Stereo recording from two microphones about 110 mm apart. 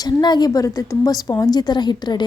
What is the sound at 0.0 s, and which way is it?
A woman's voice, 40° left (ahead or behind).